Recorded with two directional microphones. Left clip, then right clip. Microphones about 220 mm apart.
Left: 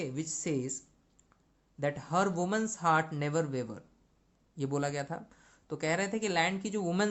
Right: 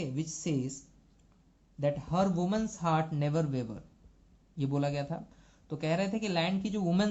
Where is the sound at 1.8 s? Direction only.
35° left (ahead or behind).